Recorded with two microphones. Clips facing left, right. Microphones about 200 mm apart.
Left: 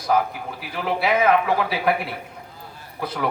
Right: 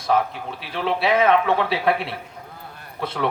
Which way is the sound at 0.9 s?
25° right (ahead or behind).